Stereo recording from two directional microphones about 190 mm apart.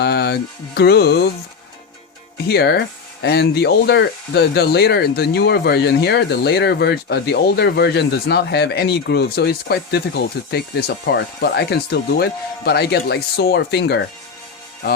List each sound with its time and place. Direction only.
0.0 s speech: 60° left (ahead or behind)
2.5 s speech: 60° left (ahead or behind)